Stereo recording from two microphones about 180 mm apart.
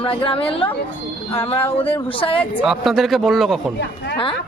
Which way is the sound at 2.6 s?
Centre (ahead or behind).